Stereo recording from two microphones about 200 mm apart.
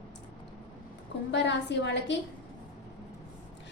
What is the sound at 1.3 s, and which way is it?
Speech, 60° left (ahead or behind).